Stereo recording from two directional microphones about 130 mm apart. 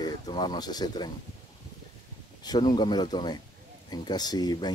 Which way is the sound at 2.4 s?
30° left (ahead or behind).